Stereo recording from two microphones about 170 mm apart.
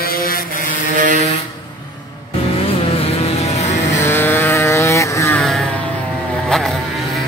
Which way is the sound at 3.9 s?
15° left (ahead or behind).